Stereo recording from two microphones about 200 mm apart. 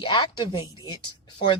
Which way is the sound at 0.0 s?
25° left (ahead or behind).